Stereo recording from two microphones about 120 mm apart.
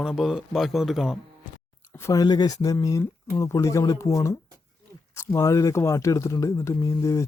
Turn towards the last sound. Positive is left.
turn(degrees=25)  # may be behind; listen again after turning